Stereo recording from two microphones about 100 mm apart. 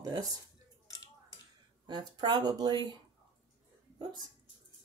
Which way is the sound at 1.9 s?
50° right (ahead or behind).